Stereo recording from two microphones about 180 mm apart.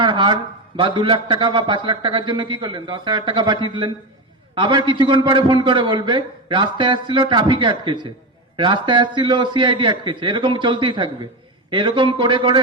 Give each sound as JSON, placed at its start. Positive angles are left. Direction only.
{"t": 0.0, "sound": "a man's voice", "side_deg": -25}